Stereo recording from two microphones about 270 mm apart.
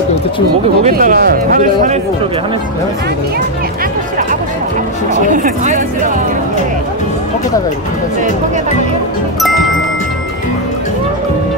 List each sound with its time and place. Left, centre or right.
0.8 s speech: right
5.2 s speech: right